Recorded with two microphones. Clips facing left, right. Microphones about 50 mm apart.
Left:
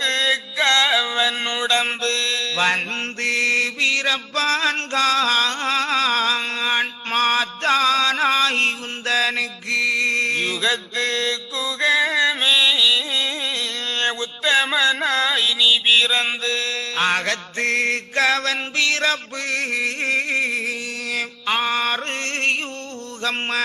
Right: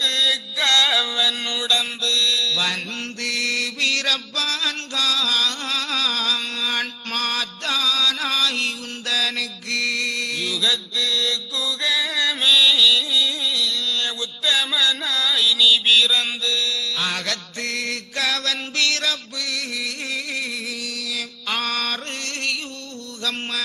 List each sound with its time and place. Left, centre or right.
0.0 s mantra: left
4.4 s music: left
23.2 s mantra: left